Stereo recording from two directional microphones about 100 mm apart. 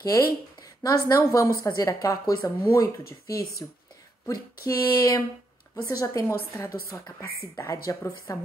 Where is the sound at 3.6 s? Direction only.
35° left (ahead or behind).